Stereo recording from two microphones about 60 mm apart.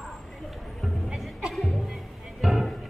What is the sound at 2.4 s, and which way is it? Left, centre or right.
Music, centre.